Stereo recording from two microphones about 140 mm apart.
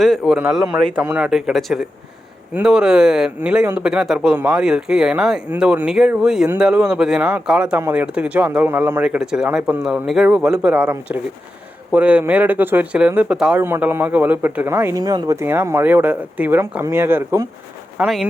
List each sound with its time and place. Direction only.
0.0 s speech: centre (ahead or behind); by 17.4 s 15° right (ahead or behind)
17.9 s speech: 5° right (ahead or behind)